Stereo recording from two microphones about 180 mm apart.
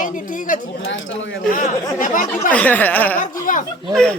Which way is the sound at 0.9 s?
90° left.